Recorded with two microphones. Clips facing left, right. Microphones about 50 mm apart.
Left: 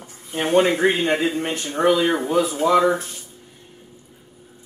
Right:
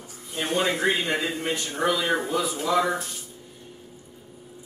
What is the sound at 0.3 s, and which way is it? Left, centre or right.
A man's voice, left.